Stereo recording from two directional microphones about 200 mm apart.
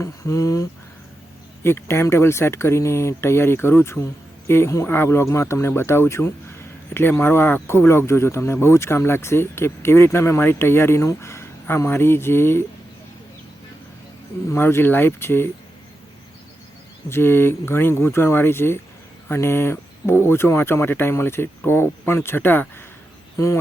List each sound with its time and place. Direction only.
0.0 s speech: 15° left (ahead or behind)
14.5 s speech: 10° left (ahead or behind)
17.1 s speech: 10° left (ahead or behind)